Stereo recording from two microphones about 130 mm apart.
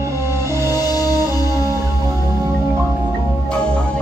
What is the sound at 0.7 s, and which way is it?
Music, 30° left (ahead or behind).